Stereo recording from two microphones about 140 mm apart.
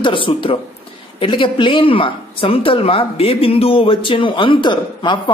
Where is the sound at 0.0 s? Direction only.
40° left (ahead or behind).